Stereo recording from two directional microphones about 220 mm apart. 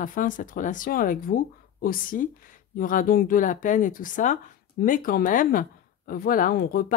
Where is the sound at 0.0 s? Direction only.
35° left (ahead or behind).